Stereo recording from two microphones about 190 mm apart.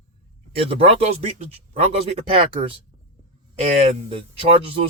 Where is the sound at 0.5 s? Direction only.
30° right (ahead or behind).